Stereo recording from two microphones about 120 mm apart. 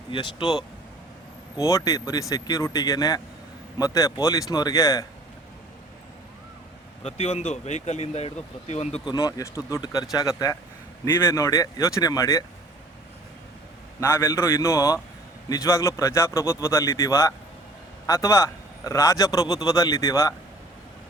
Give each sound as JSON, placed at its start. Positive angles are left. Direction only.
{"t": 0.1, "sound": "speech", "side_deg": 45}
{"t": 1.5, "sound": "a man's voice", "side_deg": 30}
{"t": 7.0, "sound": "speech", "side_deg": 60}
{"t": 9.0, "sound": "a man's voice", "side_deg": 30}
{"t": 14.0, "sound": "a man's voice", "side_deg": 20}